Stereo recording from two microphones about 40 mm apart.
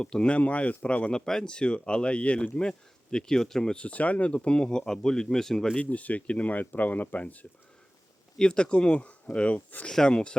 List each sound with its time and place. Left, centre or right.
0.0 s speech: left
0.3 s speech: left
1.1 s speech: centre
3.8 s speech: left
4.4 s speech: left
5.7 s speech: left
8.4 s speech: left
9.9 s speech: left